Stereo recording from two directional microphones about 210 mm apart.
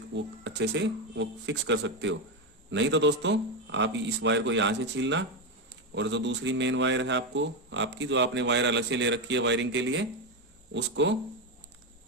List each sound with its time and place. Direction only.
0.1 s speech: 55° right (ahead or behind)